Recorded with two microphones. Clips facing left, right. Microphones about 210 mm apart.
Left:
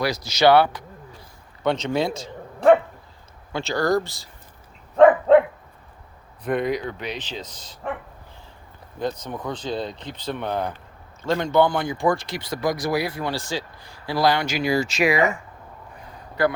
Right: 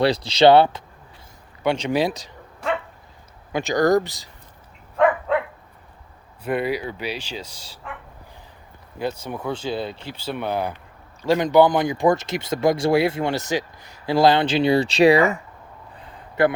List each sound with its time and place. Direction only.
0.0 s speech: 30° right (ahead or behind)
1.6 s speech: 10° right (ahead or behind)
3.5 s speech: 15° right (ahead or behind)
4.9 s dog: 45° left (ahead or behind)
6.4 s speech: 10° right (ahead or behind)
9.0 s speech: 10° right (ahead or behind); by 15.3 s 35° right (ahead or behind)
16.4 s speech: 25° right (ahead or behind)